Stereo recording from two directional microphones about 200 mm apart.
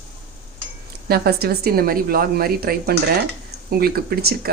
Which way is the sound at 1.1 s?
50° right (ahead or behind).